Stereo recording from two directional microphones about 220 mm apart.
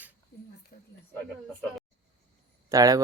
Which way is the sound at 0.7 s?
40° left (ahead or behind).